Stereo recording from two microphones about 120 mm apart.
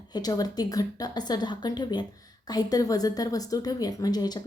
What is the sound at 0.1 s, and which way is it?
A woman's voice, 35° left (ahead or behind).